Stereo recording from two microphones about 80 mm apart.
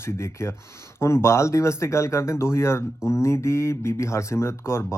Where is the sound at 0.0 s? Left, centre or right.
Left.